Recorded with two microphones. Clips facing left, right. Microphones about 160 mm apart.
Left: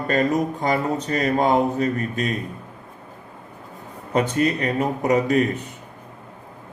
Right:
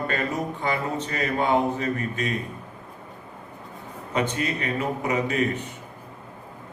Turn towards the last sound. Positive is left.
turn(degrees=40)  # may be behind; listen again after turning